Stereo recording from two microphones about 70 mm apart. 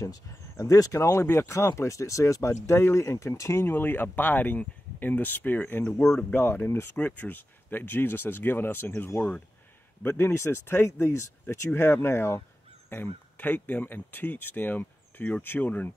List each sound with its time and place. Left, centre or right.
0.3 s speech: left
3.6 s speech: left